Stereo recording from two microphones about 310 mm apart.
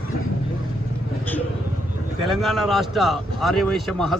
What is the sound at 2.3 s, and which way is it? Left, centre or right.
Speech, centre.